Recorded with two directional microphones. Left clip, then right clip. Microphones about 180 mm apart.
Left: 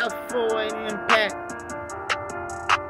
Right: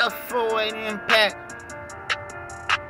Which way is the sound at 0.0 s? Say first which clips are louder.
Right 2 dB; 5° right (ahead or behind).